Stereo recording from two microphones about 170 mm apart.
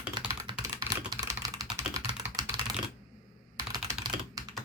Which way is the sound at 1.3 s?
20° right (ahead or behind).